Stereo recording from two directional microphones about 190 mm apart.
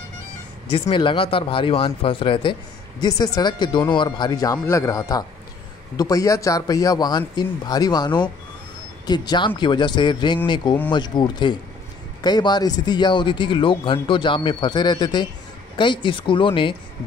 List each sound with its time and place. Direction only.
0.7 s speech: 30° left (ahead or behind)